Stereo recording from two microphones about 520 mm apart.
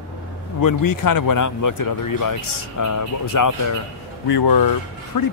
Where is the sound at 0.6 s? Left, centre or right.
Left.